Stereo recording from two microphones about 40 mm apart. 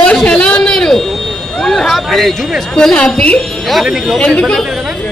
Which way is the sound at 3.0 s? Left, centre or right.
Centre.